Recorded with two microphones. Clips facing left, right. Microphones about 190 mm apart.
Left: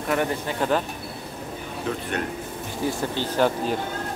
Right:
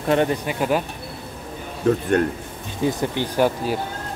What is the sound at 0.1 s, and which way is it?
Speech, 25° right (ahead or behind).